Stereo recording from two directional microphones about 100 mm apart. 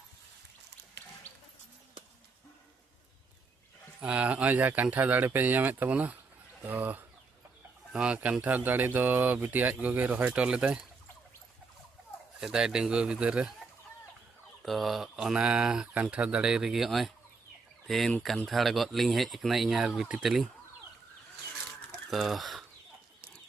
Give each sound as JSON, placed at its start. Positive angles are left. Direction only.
{"t": 4.0, "sound": "speech", "side_deg": -10}
{"t": 12.4, "sound": "speech", "side_deg": -5}
{"t": 14.6, "sound": "speech", "side_deg": 0}
{"t": 22.1, "sound": "speech", "side_deg": 0}